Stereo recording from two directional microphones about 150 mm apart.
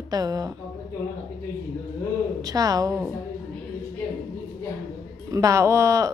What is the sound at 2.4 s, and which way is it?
Speech, 25° right (ahead or behind).